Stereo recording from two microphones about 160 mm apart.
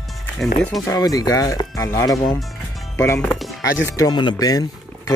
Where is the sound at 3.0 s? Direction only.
15° left (ahead or behind).